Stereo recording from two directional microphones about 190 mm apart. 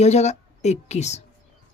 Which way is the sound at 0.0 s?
35° left (ahead or behind).